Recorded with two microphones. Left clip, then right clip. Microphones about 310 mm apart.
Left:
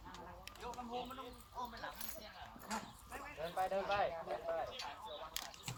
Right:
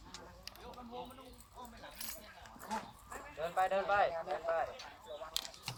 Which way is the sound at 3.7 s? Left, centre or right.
Right.